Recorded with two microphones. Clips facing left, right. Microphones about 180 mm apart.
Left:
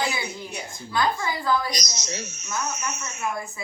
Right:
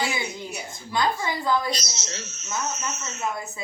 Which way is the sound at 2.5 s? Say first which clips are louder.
Even; 25° right (ahead or behind).